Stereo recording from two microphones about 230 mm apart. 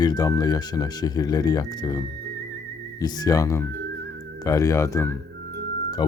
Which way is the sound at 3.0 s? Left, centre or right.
Centre.